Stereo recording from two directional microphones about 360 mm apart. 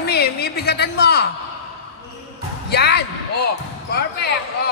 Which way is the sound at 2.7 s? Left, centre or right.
Left.